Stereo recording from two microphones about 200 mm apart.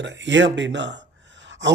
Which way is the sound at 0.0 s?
65° right (ahead or behind).